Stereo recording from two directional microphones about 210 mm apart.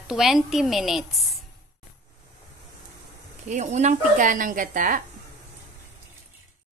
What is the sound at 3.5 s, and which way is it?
Speech, 35° right (ahead or behind).